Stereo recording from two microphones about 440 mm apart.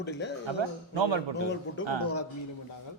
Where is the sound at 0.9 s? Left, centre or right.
Right.